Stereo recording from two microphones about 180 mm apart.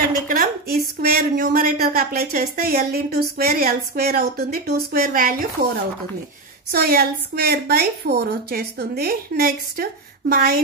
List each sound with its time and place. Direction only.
0.1 s speech: 50° right (ahead or behind)
6.7 s speech: 55° right (ahead or behind)